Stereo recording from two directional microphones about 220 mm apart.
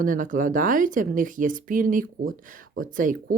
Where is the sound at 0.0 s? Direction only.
35° right (ahead or behind).